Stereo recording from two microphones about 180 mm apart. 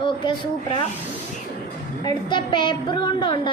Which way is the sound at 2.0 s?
25° left (ahead or behind).